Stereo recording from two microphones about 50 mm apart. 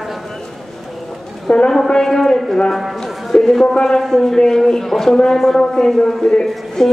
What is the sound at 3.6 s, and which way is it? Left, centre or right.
Speech, centre.